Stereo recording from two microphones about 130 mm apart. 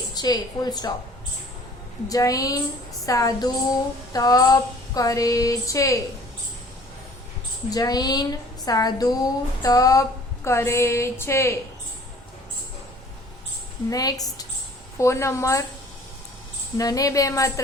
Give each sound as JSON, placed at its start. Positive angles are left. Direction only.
{"t": 0.1, "sound": "a woman's voice", "side_deg": 30}
{"t": 2.0, "sound": "a woman's voice", "side_deg": 25}
{"t": 7.7, "sound": "a woman's voice", "side_deg": 30}
{"t": 13.9, "sound": "a woman's voice", "side_deg": 30}
{"t": 16.7, "sound": "a woman's voice", "side_deg": 25}